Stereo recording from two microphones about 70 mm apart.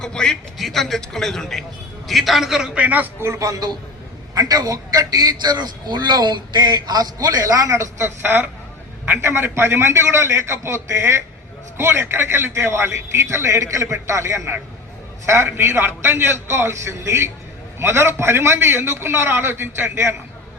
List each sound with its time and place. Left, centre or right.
0.0 s a man's voice: centre
2.7 s a man's voice: right
3.2 s speech: right
4.4 s a man's voice: right
8.2 s a man's voice: right